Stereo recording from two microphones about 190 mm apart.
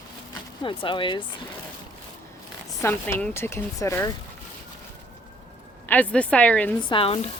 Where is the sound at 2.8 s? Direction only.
10° left (ahead or behind).